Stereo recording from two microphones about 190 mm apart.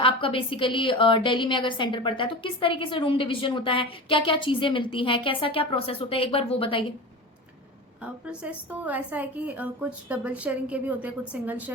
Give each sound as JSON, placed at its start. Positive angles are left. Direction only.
{"t": 0.0, "sound": "a woman's voice", "side_deg": 30}
{"t": 8.0, "sound": "a woman's voice", "side_deg": -5}